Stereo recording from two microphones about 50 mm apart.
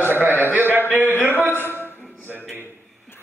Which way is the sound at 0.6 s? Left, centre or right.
Right.